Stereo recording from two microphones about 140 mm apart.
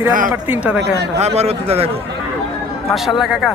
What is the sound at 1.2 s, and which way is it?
Speech, 50° right (ahead or behind).